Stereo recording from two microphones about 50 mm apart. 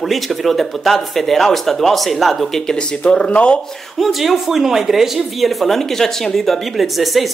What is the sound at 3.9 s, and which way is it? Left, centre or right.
Speech, centre.